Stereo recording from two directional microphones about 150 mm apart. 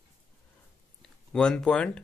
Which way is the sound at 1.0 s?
5° left (ahead or behind).